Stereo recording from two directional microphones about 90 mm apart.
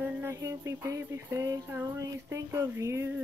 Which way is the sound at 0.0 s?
25° right (ahead or behind).